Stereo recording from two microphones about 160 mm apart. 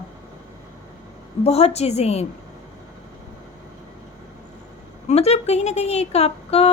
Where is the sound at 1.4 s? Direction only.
40° left (ahead or behind).